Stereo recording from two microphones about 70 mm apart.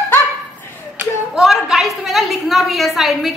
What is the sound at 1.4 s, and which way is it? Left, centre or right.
A woman's voice, centre.